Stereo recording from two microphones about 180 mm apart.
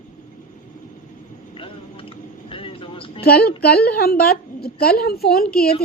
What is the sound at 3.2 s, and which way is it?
A woman's voice, 60° left (ahead or behind).